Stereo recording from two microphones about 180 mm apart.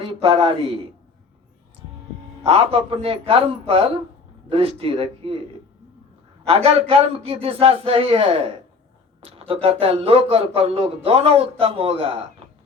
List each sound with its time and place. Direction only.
0.0 s a man's voice: 30° right (ahead or behind)
2.4 s a man's voice: 35° right (ahead or behind)
6.5 s a man's voice: 35° right (ahead or behind)
9.5 s a man's voice: 30° right (ahead or behind)